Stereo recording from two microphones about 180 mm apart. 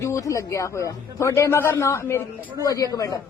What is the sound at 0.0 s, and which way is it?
A man's voice, 15° left (ahead or behind).